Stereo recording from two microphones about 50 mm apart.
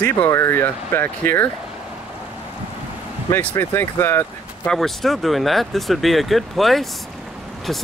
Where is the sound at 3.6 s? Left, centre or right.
Left.